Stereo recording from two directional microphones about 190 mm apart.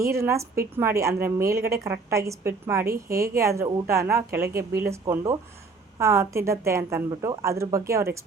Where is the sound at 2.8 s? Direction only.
50° right (ahead or behind).